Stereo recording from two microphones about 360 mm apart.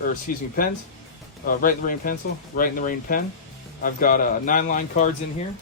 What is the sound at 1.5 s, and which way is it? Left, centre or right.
A man's voice, left.